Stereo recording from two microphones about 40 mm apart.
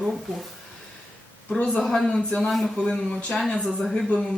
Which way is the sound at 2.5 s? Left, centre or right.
Centre.